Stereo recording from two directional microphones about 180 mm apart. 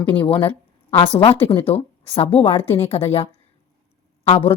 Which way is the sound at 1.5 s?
35° left (ahead or behind).